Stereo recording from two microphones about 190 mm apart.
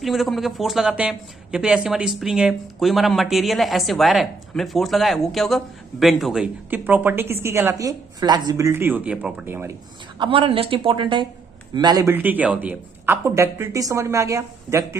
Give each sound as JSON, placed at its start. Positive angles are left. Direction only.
{"t": 0.0, "sound": "speech", "side_deg": 0}
{"t": 10.1, "sound": "a woman's voice", "side_deg": -25}